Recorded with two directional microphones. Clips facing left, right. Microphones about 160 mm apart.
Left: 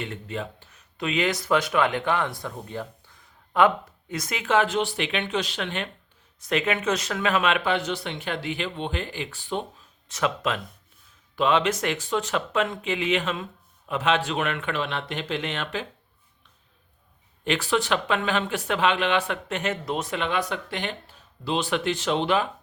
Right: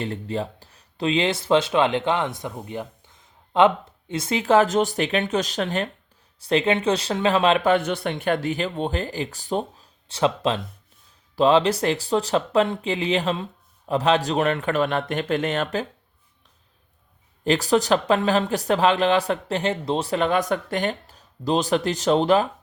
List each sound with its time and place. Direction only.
0.0 s speech: 35° right (ahead or behind)
17.4 s speech: 40° right (ahead or behind)